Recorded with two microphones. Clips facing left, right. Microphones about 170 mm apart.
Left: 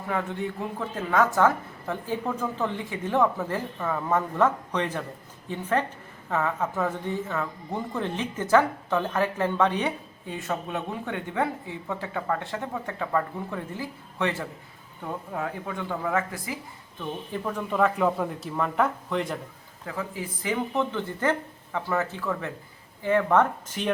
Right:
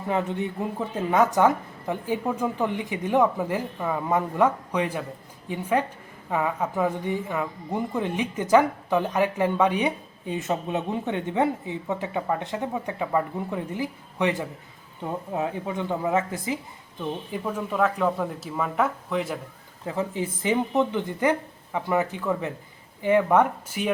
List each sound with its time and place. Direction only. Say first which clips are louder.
0.1 s a woman's voice: right 3 dB; 20° right (ahead or behind)
17.0 s speech: right 2 dB; 10° right (ahead or behind)
19.8 s speech: right 5 dB; 25° right (ahead or behind); by 23.9 s 10° right (ahead or behind)